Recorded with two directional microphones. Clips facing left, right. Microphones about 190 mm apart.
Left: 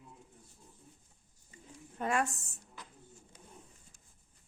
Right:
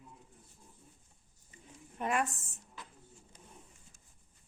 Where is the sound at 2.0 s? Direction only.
35° left (ahead or behind).